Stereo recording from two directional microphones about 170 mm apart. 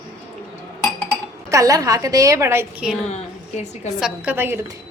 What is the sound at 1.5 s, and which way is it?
A woman's voice, 20° right (ahead or behind).